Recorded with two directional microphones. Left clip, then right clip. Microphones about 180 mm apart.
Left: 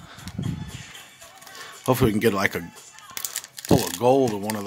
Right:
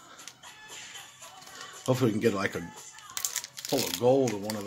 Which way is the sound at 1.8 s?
35° left (ahead or behind).